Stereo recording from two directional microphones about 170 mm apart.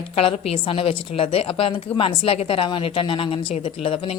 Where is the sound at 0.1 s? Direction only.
35° left (ahead or behind).